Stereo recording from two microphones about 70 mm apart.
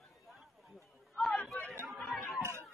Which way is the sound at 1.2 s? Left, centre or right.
Centre.